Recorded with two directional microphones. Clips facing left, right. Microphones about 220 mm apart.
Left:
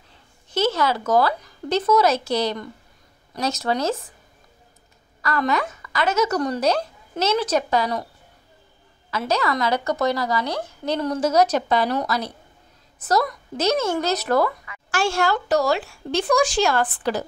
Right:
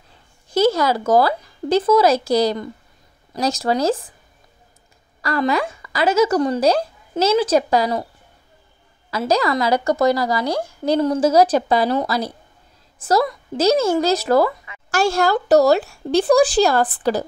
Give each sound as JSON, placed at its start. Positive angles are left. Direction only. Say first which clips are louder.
{"t": 0.7, "sound": "speech", "louder": "right 3 dB", "side_deg": -40}
{"t": 5.2, "sound": "speech", "louder": "right 3 dB", "side_deg": -30}
{"t": 9.1, "sound": "speech", "louder": "right 4 dB", "side_deg": -35}
{"t": 10.5, "sound": "a woman's voice", "louder": "right 6 dB", "side_deg": -10}
{"t": 11.0, "sound": "a woman's voice", "louder": "right 4 dB", "side_deg": -30}